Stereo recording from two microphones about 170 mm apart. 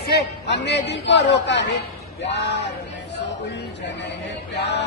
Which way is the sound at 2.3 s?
80° left.